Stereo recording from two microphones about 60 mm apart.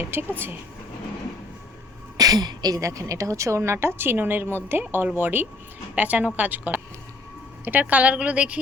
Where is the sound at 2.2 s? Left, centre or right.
Right.